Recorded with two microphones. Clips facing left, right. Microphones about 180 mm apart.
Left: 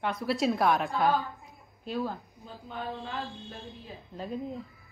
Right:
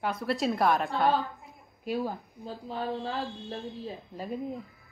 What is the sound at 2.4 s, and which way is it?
Speech, 35° right (ahead or behind).